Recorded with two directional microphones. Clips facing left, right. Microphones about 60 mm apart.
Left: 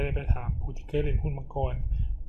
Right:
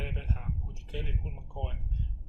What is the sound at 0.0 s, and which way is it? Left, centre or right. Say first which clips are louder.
Speech: left 6 dB; left.